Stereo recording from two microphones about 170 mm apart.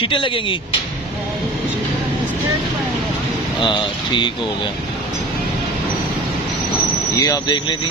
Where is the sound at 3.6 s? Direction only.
30° left (ahead or behind).